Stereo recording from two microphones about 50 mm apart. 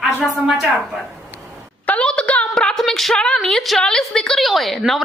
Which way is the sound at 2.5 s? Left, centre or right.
Centre.